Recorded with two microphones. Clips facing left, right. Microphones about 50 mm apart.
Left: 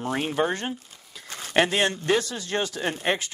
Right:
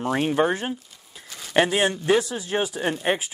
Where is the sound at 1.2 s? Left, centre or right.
Left.